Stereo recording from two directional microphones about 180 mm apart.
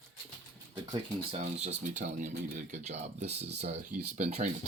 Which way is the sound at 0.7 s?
35° right (ahead or behind).